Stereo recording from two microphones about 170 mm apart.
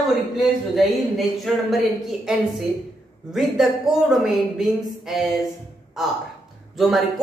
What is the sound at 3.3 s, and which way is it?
Speech, centre (ahead or behind).